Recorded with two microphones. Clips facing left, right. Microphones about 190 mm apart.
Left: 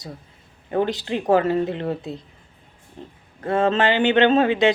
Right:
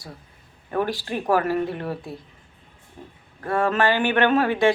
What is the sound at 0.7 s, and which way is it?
Speech, 20° left (ahead or behind).